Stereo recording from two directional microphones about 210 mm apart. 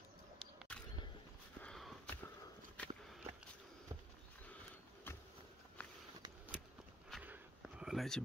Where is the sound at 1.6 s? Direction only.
Centre (ahead or behind).